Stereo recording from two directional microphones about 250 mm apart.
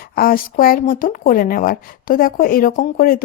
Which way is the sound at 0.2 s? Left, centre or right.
Left.